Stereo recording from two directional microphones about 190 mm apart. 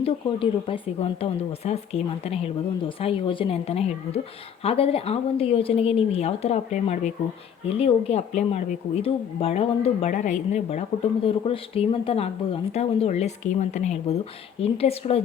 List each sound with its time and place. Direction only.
0.0 s speech: 30° left (ahead or behind)